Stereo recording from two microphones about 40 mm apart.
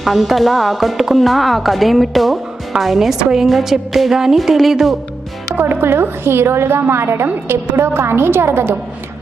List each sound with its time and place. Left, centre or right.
0.0 s speech: centre
3.2 s music: centre
4.4 s speech: centre
5.5 s a woman's voice: right